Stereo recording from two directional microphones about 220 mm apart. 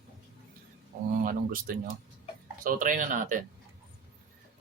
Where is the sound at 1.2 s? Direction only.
40° right (ahead or behind).